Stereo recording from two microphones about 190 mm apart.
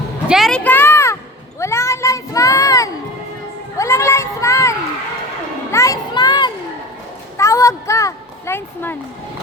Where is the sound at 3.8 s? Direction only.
15° left (ahead or behind).